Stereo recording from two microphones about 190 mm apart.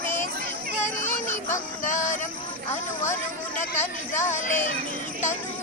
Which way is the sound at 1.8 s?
40° left (ahead or behind).